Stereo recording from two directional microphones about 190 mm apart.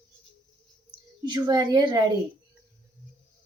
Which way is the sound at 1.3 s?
25° right (ahead or behind).